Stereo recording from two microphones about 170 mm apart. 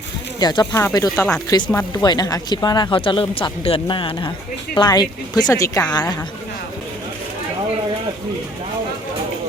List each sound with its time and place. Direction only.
0.3 s speech: 25° left (ahead or behind)